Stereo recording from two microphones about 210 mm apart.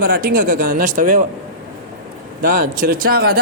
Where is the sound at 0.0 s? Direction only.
45° right (ahead or behind).